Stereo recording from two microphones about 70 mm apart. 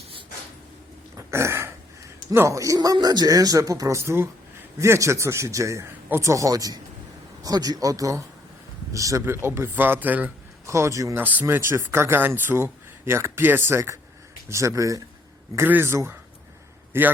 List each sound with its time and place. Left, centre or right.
1.1 s a sound: right
2.3 s speech: right
2.7 s speech: right
9.2 s speech: right
10.7 s speech: right
11.2 s speech: right
11.5 s speech: right
15.5 s speech: right